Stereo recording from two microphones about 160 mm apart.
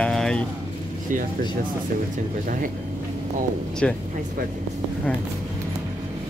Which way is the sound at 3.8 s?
5° left (ahead or behind).